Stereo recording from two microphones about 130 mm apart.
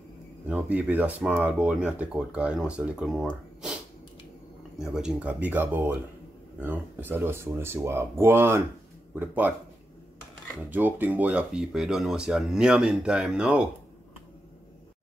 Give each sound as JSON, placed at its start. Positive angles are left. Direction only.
{"t": 0.5, "sound": "speech", "side_deg": -15}
{"t": 4.7, "sound": "speech", "side_deg": -5}
{"t": 10.7, "sound": "speech", "side_deg": -15}